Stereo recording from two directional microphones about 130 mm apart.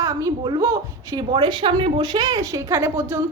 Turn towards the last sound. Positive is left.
turn(degrees=-15)  # may be behind; listen again after turning